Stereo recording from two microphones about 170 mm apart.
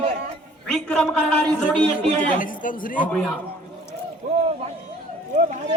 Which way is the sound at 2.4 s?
50° left (ahead or behind).